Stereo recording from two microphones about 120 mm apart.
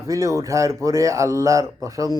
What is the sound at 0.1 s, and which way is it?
Speech, 25° right (ahead or behind).